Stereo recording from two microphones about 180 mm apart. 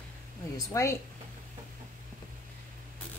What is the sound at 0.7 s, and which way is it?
Speech, 15° left (ahead or behind).